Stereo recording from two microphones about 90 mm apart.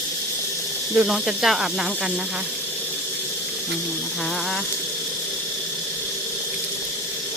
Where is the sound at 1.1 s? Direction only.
5° right (ahead or behind).